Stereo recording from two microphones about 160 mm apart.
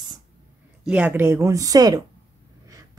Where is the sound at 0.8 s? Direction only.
10° right (ahead or behind).